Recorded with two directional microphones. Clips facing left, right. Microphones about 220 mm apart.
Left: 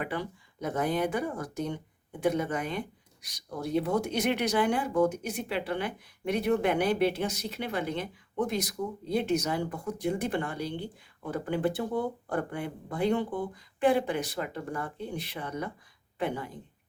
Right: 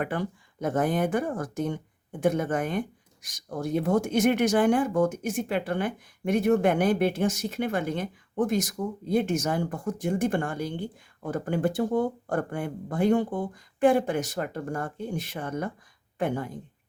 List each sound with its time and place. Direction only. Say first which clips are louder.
0.0 s speech: right 4 dB; 50° right (ahead or behind)